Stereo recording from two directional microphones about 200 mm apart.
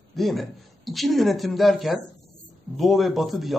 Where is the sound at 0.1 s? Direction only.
Centre (ahead or behind).